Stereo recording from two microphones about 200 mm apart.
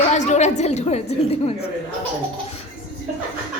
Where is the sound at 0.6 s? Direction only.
35° left (ahead or behind).